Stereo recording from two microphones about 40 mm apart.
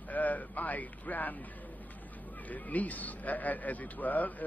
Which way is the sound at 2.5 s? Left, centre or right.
Left.